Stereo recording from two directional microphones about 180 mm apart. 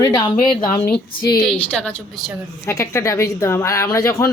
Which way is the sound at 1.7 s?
5° left (ahead or behind).